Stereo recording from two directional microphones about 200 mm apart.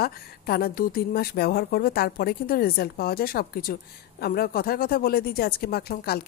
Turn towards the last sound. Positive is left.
turn(degrees=50)  # may be behind; listen again after turning